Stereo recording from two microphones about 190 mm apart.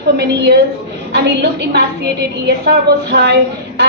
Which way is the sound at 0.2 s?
60° right (ahead or behind).